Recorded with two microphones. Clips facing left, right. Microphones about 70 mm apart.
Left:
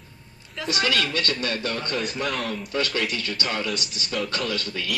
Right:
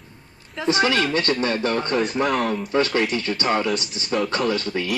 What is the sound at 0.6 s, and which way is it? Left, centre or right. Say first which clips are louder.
A woman's voice: right 5 dB; right.